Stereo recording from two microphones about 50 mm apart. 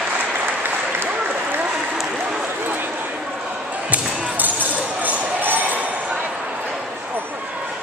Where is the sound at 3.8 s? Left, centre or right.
Right.